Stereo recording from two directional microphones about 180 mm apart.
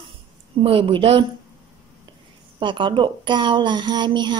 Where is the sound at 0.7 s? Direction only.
30° right (ahead or behind).